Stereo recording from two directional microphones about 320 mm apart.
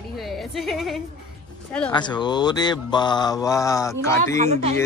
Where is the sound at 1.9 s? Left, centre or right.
Centre.